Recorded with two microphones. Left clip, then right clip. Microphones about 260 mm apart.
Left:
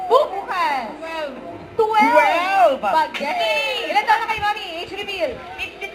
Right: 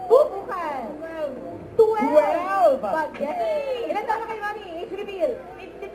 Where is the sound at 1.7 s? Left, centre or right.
Centre.